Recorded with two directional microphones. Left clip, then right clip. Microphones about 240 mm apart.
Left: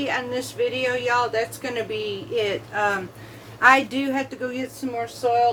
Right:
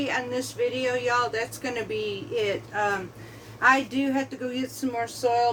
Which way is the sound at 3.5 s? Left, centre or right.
Left.